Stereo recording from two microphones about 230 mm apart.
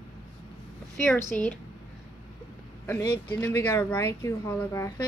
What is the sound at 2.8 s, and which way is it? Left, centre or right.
Speech, centre.